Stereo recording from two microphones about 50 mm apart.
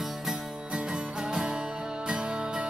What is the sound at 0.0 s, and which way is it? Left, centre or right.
Music, centre.